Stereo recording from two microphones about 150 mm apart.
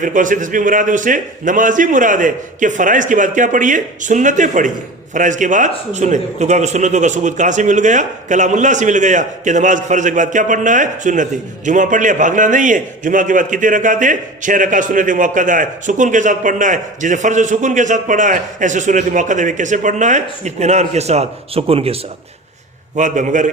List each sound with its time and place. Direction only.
0.0 s a man's voice: 60° right (ahead or behind); by 21.9 s 40° right (ahead or behind)
23.0 s a man's voice: 55° right (ahead or behind)